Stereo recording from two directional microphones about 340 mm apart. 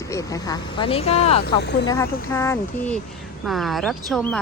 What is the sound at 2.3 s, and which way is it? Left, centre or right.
Speech, centre.